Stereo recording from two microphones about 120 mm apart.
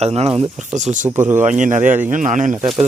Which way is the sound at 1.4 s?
90° right.